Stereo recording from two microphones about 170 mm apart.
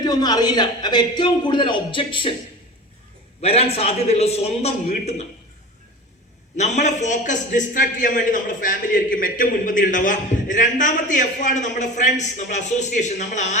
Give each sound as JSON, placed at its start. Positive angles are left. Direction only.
{"t": 0.0, "sound": "a man's voice", "side_deg": 25}
{"t": 3.4, "sound": "a man's voice", "side_deg": 35}
{"t": 6.6, "sound": "a man's voice", "side_deg": 45}